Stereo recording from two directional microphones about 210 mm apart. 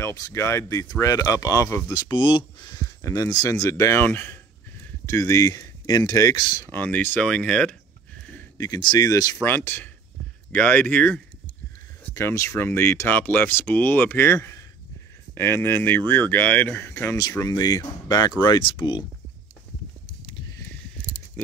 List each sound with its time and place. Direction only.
0.0 s speech: 15° left (ahead or behind)